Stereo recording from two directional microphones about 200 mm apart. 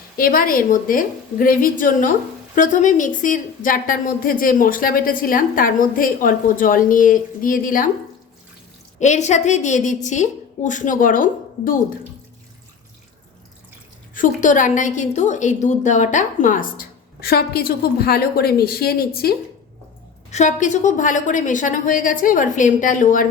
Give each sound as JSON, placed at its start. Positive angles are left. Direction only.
{"t": 0.2, "sound": "a woman's voice", "side_deg": 45}
{"t": 9.0, "sound": "a woman's voice", "side_deg": 35}
{"t": 14.1, "sound": "a woman's voice", "side_deg": 40}
{"t": 20.3, "sound": "a woman's voice", "side_deg": 35}